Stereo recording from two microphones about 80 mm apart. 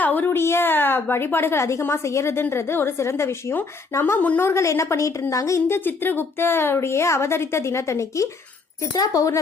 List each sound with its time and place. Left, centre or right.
0.0 s a woman's voice: left